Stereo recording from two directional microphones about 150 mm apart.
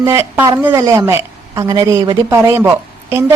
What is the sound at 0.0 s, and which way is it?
A woman's voice, 15° right (ahead or behind).